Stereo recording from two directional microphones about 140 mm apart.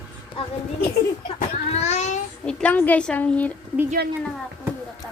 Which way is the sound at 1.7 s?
55° left (ahead or behind).